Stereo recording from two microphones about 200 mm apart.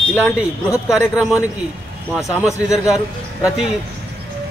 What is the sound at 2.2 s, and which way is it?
Speech, 15° left (ahead or behind).